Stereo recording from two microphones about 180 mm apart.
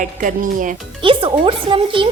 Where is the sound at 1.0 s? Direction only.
30° right (ahead or behind).